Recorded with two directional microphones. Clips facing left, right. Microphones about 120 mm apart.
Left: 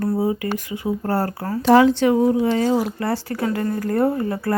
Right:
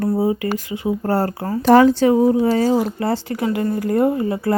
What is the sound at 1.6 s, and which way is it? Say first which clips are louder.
A woman's voice: right 2 dB; 50° right (ahead or behind).